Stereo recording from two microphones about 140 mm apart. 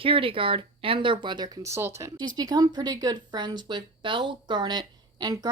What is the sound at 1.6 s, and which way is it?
Speech, 20° right (ahead or behind).